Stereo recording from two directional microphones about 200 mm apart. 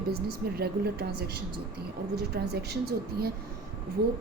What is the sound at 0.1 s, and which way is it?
Speech, 55° right (ahead or behind).